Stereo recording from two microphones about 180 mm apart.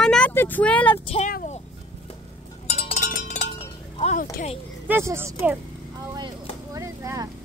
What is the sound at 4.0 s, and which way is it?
Speech, 40° left (ahead or behind).